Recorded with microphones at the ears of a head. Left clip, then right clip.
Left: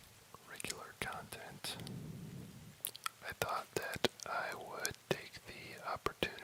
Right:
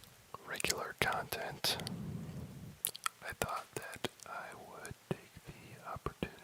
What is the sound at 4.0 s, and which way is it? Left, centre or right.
Whispering, left.